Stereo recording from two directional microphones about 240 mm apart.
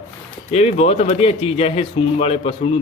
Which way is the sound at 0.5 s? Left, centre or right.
Left.